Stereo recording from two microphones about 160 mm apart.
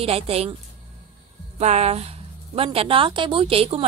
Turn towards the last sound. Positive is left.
turn(degrees=-40)  # may be behind; listen again after turning